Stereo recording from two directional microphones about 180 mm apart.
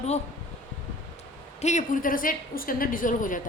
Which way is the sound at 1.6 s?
45° left (ahead or behind).